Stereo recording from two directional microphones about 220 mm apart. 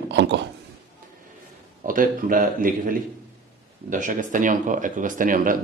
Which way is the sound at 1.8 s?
40° right (ahead or behind).